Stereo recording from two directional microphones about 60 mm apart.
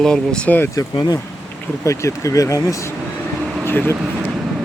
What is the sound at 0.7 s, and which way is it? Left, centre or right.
Speech, left.